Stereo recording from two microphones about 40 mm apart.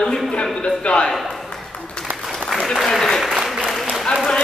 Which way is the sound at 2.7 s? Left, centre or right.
Centre.